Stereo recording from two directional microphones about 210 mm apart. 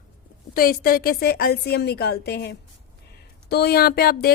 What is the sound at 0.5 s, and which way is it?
A woman's voice, 45° left (ahead or behind).